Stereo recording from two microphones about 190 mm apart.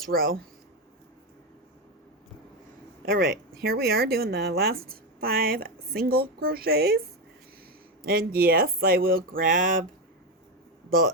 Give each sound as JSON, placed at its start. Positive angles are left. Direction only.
{"t": 0.0, "sound": "a woman's voice", "side_deg": -50}
{"t": 3.1, "sound": "a woman's voice", "side_deg": -50}
{"t": 8.0, "sound": "a woman's voice", "side_deg": -55}